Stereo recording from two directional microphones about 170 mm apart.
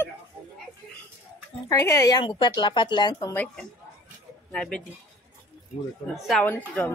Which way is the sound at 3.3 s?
10° left (ahead or behind).